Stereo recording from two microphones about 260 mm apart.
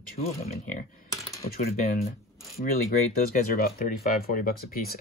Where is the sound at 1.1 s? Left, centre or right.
Centre.